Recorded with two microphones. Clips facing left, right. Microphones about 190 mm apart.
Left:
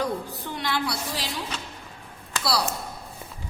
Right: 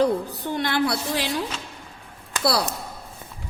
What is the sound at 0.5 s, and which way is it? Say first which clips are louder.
Speech: right 6 dB; 50° right (ahead or behind).